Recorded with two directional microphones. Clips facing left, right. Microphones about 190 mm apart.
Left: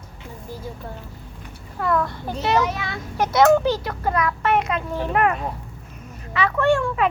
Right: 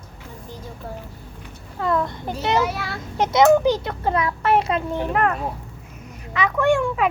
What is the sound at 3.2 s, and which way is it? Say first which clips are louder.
A child's voice: right 1 dB; 20° right (ahead or behind).